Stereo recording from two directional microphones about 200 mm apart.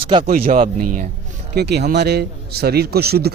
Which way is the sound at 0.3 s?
45° right (ahead or behind).